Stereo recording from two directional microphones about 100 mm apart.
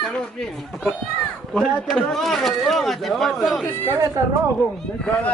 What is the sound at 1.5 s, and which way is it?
Speech, centre (ahead or behind).